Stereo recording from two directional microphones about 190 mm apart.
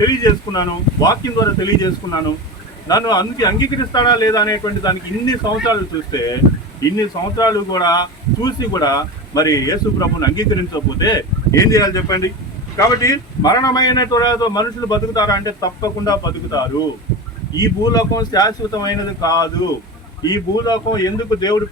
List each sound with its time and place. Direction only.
0.0 s speech: 20° left (ahead or behind)